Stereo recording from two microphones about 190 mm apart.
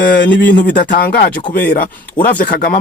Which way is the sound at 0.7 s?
45° left (ahead or behind).